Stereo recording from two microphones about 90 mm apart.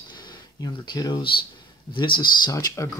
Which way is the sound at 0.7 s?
45° left (ahead or behind).